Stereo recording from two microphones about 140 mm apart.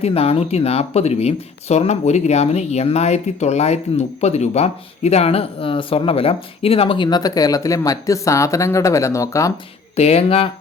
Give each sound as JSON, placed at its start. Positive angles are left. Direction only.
{"t": 0.0, "sound": "speech", "side_deg": 45}
{"t": 9.9, "sound": "speech", "side_deg": 50}